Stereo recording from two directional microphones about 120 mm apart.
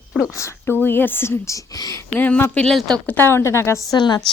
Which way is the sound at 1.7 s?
30° left (ahead or behind).